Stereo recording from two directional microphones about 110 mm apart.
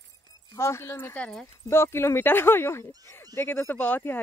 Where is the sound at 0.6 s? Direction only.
25° left (ahead or behind).